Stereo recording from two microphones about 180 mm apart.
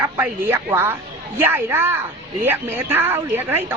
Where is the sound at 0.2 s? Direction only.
10° right (ahead or behind).